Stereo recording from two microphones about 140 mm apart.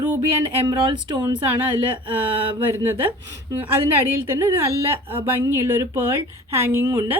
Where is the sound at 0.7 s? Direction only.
30° right (ahead or behind).